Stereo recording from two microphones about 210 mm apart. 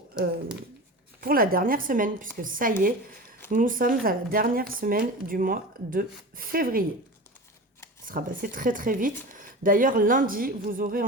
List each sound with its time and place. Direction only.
1.2 s speech: 45° right (ahead or behind)
8.0 s speech: 40° right (ahead or behind)